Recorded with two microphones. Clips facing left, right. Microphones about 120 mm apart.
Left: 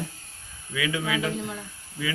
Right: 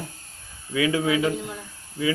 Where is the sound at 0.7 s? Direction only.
30° right (ahead or behind).